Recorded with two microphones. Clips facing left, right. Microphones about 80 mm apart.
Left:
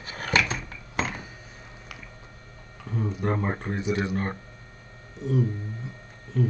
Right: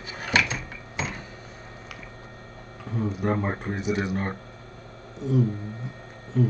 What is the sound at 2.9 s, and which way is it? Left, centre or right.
Speech, centre.